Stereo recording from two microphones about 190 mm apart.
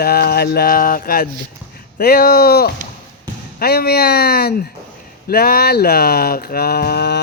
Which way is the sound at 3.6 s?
55° left (ahead or behind).